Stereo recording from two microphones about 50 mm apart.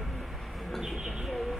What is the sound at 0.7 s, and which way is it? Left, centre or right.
Bird, centre.